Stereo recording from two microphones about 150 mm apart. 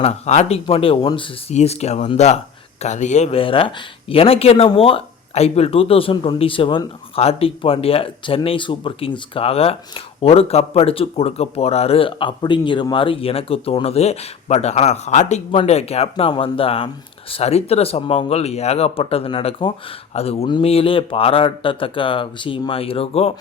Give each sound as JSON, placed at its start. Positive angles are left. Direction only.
{"t": 0.0, "sound": "speech", "side_deg": 45}